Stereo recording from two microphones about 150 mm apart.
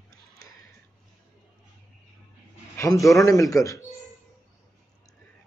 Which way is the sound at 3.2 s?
20° left (ahead or behind).